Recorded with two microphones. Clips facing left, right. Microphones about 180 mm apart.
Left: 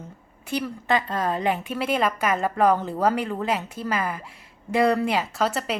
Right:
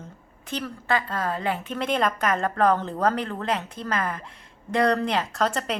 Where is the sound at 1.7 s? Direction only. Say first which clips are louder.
Left 1 dB; 5° left (ahead or behind).